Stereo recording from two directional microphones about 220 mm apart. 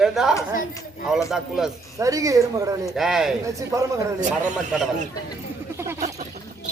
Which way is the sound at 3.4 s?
15° right (ahead or behind).